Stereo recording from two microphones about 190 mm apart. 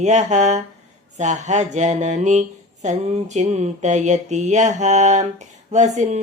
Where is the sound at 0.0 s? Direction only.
40° right (ahead or behind).